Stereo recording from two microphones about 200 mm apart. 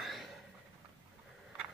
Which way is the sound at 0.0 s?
Centre (ahead or behind).